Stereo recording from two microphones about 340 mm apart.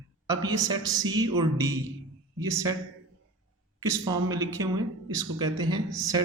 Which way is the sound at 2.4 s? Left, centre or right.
Centre.